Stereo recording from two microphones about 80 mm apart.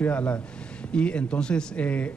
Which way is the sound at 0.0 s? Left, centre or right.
Centre.